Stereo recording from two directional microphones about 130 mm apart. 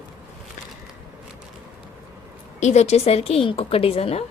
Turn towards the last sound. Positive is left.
turn(degrees=50)  # may be behind; listen again after turning